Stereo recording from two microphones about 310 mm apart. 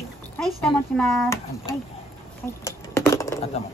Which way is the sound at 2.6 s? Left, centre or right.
Centre.